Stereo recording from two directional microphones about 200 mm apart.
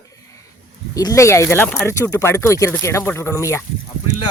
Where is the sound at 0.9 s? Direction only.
15° left (ahead or behind).